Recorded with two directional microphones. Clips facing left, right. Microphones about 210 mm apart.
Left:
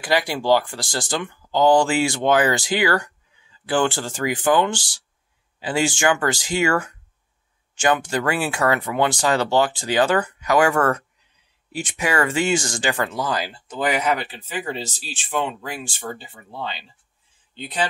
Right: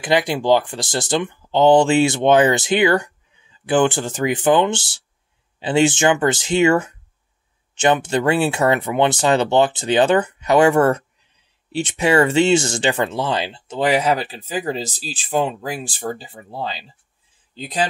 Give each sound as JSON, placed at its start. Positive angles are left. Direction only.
{"t": 0.0, "sound": "speech", "side_deg": -20}